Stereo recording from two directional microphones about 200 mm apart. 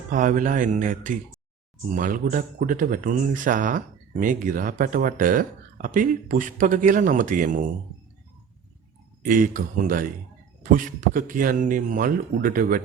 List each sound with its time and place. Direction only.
0.1 s speech: 40° right (ahead or behind)
9.2 s speech: 45° right (ahead or behind)